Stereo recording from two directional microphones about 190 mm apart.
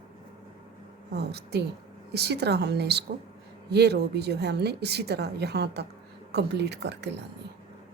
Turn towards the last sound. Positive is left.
turn(degrees=-60)  # may be behind; listen again after turning